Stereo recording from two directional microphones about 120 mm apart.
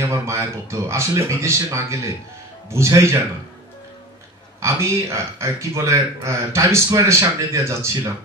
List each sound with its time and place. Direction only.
0.0 s speech: 25° right (ahead or behind)
4.6 s speech: 25° right (ahead or behind)